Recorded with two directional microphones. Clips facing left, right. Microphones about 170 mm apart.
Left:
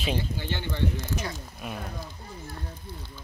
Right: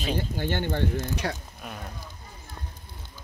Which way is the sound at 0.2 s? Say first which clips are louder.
Right 4 dB; 50° right (ahead or behind).